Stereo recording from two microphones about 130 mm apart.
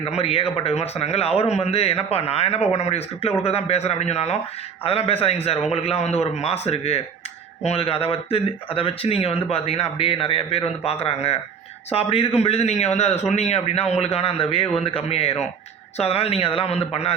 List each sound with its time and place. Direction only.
0.0 s a man's voice: 50° left (ahead or behind)